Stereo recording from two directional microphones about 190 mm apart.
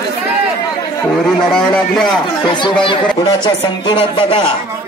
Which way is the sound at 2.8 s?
25° left (ahead or behind).